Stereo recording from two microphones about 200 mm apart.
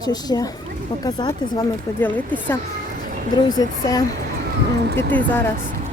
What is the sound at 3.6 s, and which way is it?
A woman's voice, 20° left (ahead or behind).